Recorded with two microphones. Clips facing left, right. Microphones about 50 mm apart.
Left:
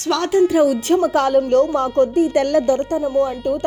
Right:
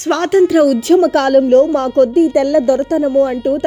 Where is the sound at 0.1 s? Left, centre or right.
Right.